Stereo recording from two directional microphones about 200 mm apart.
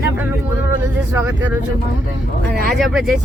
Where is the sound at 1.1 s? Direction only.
10° right (ahead or behind).